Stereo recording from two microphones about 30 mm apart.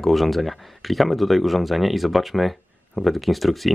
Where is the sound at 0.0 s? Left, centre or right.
Centre.